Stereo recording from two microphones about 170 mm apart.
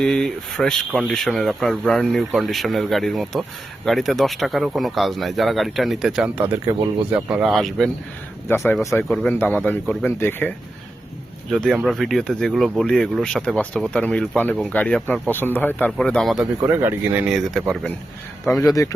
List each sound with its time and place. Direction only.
0.0 s speech: 5° left (ahead or behind); by 7.3 s 15° right (ahead or behind)
7.3 s speech: 5° right (ahead or behind)
8.4 s speech: 15° left (ahead or behind)
11.5 s speech: 5° left (ahead or behind)
16.6 s speech: 15° right (ahead or behind); by 17.9 s centre (ahead or behind)
18.4 s speech: 15° left (ahead or behind)